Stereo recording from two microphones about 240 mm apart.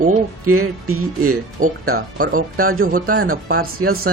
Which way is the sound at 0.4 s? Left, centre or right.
Right.